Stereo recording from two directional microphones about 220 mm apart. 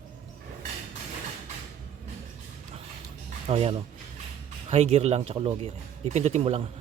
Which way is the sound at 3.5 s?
25° right (ahead or behind).